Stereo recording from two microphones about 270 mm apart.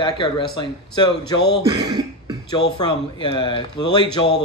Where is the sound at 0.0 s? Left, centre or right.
Centre.